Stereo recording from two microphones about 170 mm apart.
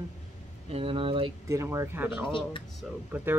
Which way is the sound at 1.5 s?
15° right (ahead or behind).